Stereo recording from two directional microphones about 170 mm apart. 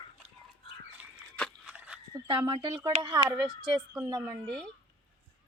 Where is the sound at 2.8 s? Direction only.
25° right (ahead or behind).